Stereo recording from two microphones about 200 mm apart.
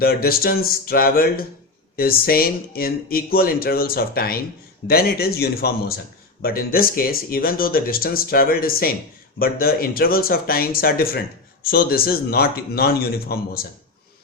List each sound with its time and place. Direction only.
0.0 s speech: 50° left (ahead or behind)